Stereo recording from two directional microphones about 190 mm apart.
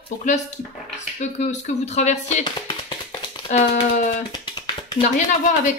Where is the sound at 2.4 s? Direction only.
25° left (ahead or behind).